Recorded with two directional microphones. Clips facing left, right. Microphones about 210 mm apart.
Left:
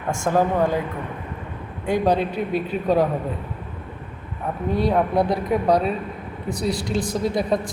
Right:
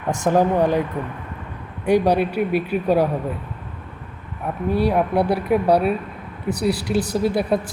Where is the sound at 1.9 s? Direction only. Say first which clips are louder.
Right 3 dB; 10° right (ahead or behind).